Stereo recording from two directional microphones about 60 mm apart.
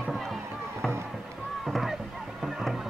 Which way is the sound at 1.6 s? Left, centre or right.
Centre.